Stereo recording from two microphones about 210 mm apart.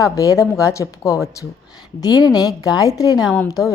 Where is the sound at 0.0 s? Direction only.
15° left (ahead or behind).